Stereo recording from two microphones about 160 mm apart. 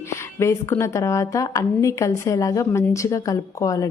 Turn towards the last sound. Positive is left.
turn(degrees=20)  # may be behind; listen again after turning